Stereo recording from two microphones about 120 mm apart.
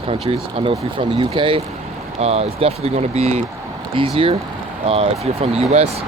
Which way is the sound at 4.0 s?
45° right (ahead or behind).